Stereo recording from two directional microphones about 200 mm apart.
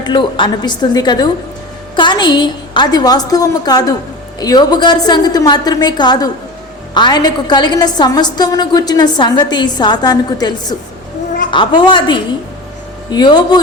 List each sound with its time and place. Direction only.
0.0 s a woman's voice: 25° left (ahead or behind)